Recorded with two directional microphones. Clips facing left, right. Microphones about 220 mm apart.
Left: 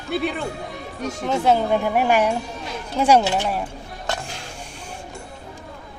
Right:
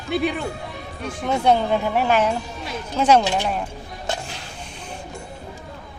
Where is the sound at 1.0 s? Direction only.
40° left (ahead or behind).